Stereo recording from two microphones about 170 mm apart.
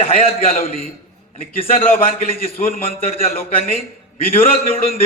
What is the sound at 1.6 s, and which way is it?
A man's voice, 35° left (ahead or behind).